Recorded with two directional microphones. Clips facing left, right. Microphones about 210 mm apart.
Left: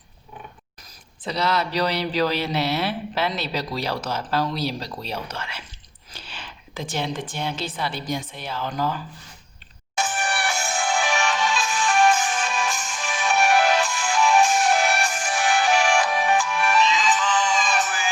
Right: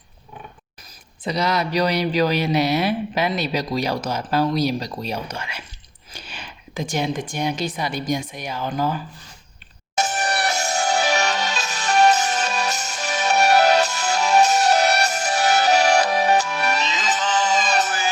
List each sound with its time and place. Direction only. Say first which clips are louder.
1.2 s speech: right 2 dB; 15° right (ahead or behind)
9.9 s music: right 3 dB; 40° right (ahead or behind)